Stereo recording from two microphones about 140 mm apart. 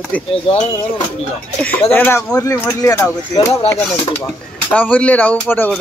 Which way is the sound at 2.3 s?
20° left (ahead or behind).